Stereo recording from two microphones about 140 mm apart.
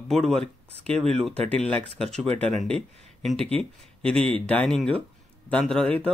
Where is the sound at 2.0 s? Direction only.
5° left (ahead or behind).